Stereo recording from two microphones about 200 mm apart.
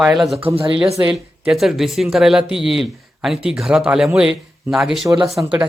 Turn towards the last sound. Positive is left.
turn(degrees=-15)  # may be behind; listen again after turning